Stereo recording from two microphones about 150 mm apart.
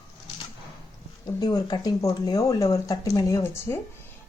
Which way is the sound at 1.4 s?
25° left (ahead or behind).